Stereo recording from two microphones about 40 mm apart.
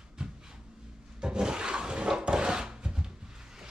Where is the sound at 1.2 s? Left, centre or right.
Centre.